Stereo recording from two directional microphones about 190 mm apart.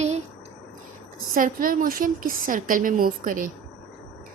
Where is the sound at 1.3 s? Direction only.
45° right (ahead or behind).